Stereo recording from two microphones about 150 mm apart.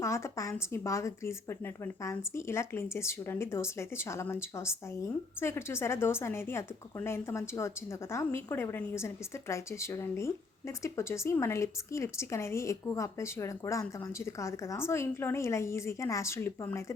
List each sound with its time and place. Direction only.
0.0 s speech: 20° left (ahead or behind)